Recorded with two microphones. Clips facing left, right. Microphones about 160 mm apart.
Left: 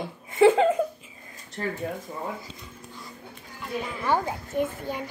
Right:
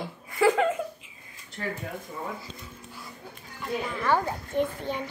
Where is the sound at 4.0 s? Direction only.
15° left (ahead or behind).